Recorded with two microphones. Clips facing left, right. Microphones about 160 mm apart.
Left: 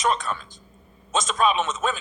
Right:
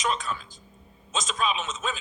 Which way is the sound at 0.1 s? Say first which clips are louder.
Left 4 dB; 50° left (ahead or behind).